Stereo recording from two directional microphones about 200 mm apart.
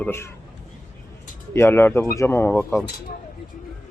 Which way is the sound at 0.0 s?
10° left (ahead or behind).